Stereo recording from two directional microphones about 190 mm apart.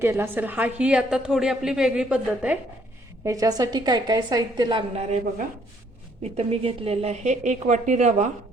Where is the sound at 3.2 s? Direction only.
15° right (ahead or behind).